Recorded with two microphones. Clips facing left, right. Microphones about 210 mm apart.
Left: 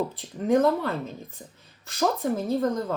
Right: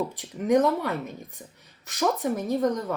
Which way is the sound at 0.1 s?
15° right (ahead or behind).